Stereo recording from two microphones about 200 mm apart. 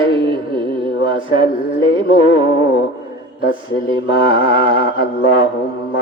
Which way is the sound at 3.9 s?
25° right (ahead or behind).